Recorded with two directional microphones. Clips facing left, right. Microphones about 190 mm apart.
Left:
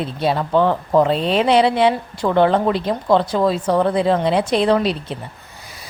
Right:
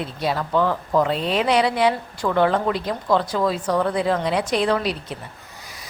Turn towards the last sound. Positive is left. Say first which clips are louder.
# left 5 dB
turn(degrees=25)  # may be behind; listen again after turning